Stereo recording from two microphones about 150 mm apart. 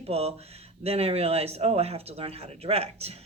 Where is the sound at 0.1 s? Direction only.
45° right (ahead or behind).